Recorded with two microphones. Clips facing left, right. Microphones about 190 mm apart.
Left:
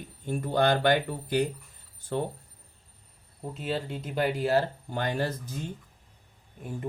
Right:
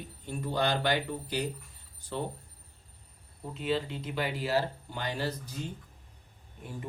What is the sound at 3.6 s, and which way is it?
Speech, 45° left (ahead or behind).